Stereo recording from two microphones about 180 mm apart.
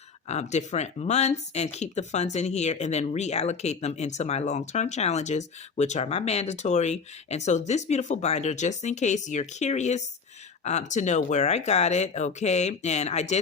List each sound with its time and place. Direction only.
0.3 s speech: 40° left (ahead or behind)